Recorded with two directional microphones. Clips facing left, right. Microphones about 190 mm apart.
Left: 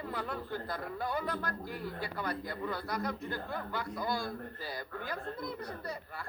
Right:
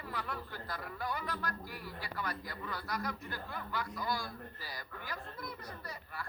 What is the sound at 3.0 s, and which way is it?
Speech, 25° left (ahead or behind).